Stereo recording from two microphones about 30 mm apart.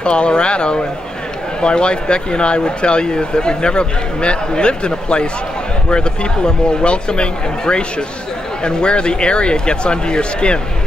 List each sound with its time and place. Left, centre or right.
0.0 s speech: left